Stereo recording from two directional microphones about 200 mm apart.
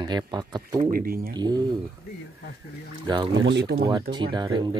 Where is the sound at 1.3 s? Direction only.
20° right (ahead or behind).